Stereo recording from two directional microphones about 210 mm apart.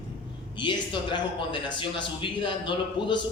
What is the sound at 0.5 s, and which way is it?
A man's voice, 20° left (ahead or behind).